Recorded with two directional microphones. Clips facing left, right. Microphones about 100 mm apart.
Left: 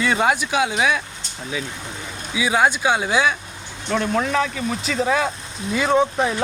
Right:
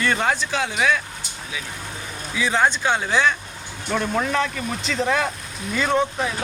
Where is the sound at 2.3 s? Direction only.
10° left (ahead or behind).